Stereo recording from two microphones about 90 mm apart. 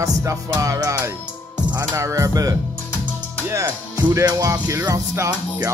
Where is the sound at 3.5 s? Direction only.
35° right (ahead or behind).